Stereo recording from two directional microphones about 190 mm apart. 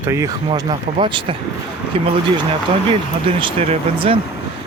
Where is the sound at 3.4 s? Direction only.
30° right (ahead or behind).